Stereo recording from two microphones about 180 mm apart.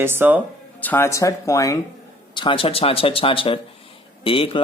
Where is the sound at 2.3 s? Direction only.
30° left (ahead or behind).